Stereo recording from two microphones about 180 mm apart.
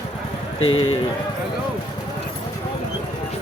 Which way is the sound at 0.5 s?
90° left.